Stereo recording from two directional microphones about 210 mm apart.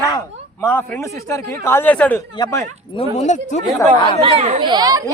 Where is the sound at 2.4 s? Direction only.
20° left (ahead or behind).